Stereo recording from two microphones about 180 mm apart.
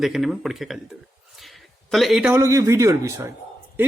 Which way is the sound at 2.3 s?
15° right (ahead or behind).